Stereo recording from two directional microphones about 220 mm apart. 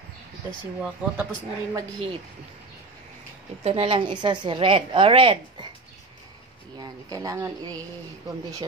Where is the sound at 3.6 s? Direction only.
25° right (ahead or behind).